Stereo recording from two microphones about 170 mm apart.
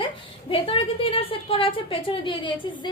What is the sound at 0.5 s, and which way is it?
A woman's voice, 30° left (ahead or behind).